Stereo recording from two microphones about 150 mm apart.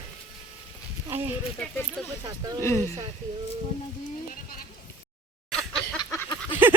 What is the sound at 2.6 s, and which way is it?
Speech, 15° left (ahead or behind).